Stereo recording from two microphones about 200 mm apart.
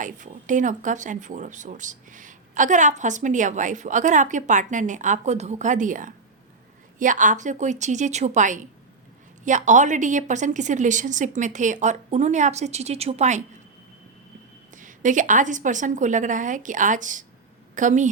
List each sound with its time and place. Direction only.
0.0 s speech: 40° right (ahead or behind)
14.8 s speech: 40° right (ahead or behind)